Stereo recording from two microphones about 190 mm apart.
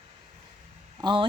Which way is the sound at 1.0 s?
25° right (ahead or behind).